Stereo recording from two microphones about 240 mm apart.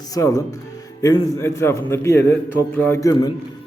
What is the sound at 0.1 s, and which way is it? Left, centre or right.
A man's voice, centre.